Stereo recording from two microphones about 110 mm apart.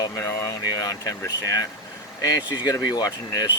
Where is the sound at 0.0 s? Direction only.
25° left (ahead or behind).